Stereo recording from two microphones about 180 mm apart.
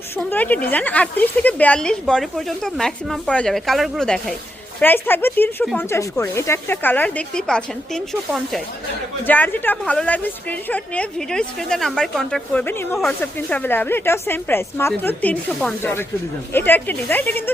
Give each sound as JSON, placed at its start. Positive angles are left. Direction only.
{"t": 0.2, "sound": "a woman's voice", "side_deg": 10}